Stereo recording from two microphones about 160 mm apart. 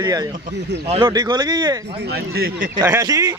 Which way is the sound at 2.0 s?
80° right.